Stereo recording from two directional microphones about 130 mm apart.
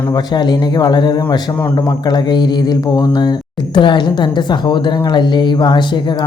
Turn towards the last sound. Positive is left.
turn(degrees=35)  # may be behind; listen again after turning